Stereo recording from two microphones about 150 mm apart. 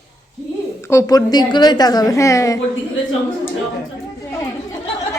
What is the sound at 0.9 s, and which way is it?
A woman's voice, 20° left (ahead or behind).